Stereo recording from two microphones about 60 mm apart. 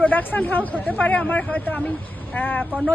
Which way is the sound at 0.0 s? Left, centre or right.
Left.